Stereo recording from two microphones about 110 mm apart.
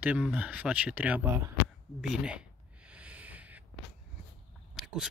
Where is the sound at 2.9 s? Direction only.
10° right (ahead or behind).